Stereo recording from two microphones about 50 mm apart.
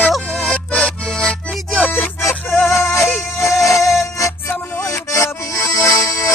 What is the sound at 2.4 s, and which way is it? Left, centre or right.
Music, left.